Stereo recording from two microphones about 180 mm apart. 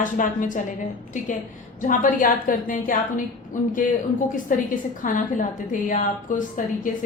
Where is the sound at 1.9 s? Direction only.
45° left (ahead or behind).